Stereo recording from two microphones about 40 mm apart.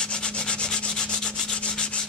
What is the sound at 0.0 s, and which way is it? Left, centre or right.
Rub, left.